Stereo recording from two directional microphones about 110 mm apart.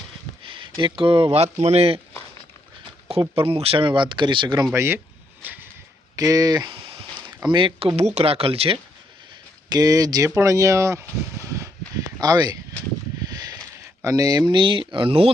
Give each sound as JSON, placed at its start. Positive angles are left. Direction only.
{"t": 0.4, "sound": "speech", "side_deg": -50}
{"t": 3.1, "sound": "speech", "side_deg": -55}
{"t": 4.7, "sound": "speech", "side_deg": -25}
{"t": 5.4, "sound": "a sound", "side_deg": -15}
{"t": 6.1, "sound": "speech", "side_deg": -35}
{"t": 7.9, "sound": "speech", "side_deg": -80}
{"t": 9.6, "sound": "speech", "side_deg": -35}
{"t": 13.2, "sound": "a sound", "side_deg": -35}
{"t": 14.0, "sound": "speech", "side_deg": -30}